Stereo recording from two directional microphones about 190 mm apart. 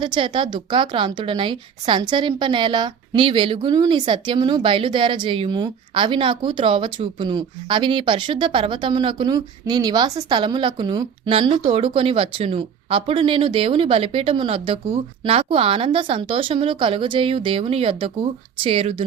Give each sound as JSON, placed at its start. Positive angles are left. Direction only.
{"t": 0.0, "sound": "a woman's voice", "side_deg": -25}